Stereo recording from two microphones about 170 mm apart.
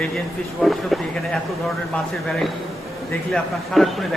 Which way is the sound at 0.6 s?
Centre (ahead or behind).